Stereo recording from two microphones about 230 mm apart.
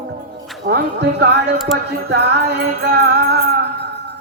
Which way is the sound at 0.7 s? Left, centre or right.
Right.